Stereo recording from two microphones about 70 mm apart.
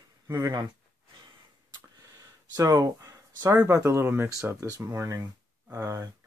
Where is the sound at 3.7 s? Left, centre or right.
Right.